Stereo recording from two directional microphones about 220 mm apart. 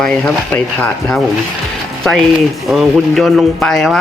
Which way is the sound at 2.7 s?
Centre (ahead or behind).